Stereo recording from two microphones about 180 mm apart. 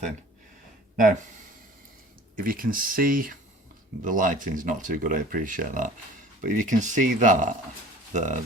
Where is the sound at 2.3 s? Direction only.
50° right (ahead or behind).